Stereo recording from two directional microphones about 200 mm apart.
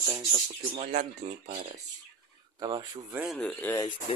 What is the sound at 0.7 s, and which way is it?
Speech, 35° right (ahead or behind).